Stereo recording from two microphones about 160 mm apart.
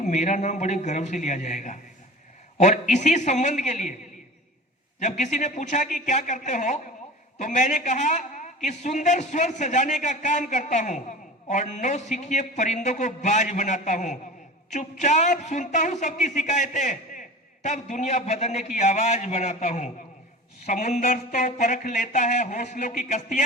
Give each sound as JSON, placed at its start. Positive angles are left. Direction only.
{"t": 0.0, "sound": "a man's voice", "side_deg": 50}
{"t": 4.9, "sound": "a man's voice", "side_deg": 50}